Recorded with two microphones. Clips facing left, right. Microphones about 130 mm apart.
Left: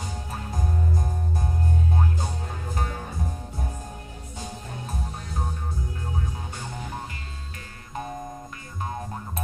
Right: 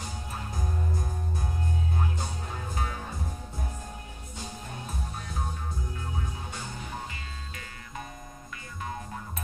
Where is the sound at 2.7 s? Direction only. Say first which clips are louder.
Left 3 dB; 45° left (ahead or behind).